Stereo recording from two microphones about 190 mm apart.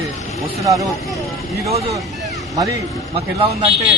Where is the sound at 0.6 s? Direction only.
15° right (ahead or behind).